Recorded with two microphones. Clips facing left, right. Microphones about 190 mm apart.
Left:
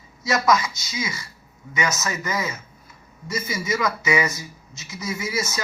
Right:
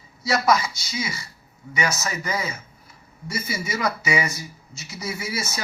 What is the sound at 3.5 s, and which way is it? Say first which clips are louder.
Speech: left 2 dB; 30° right (ahead or behind).